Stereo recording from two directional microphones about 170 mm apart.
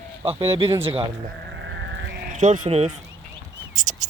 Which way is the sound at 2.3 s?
45° right (ahead or behind).